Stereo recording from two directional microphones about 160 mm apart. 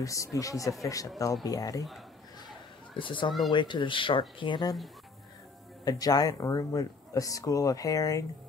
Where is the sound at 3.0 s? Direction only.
30° left (ahead or behind).